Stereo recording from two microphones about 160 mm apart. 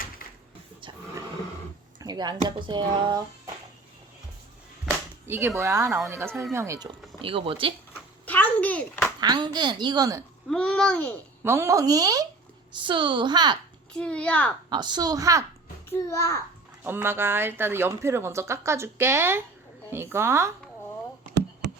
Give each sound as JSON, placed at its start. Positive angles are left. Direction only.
{"t": 2.0, "sound": "speech", "side_deg": -25}
{"t": 5.5, "sound": "a woman's voice", "side_deg": -15}
{"t": 7.2, "sound": "speech", "side_deg": -35}
{"t": 8.2, "sound": "a sound", "side_deg": 10}
{"t": 9.2, "sound": "a woman's voice", "side_deg": -25}
{"t": 10.5, "sound": "speech", "side_deg": 5}
{"t": 11.4, "sound": "a woman's voice", "side_deg": -15}
{"t": 13.9, "sound": "a child's voice", "side_deg": 5}
{"t": 14.7, "sound": "a woman's voice", "side_deg": -25}
{"t": 15.9, "sound": "a child's voice", "side_deg": 20}
{"t": 16.8, "sound": "speech", "side_deg": -15}